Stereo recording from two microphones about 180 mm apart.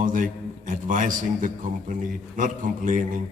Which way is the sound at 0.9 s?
45° right (ahead or behind).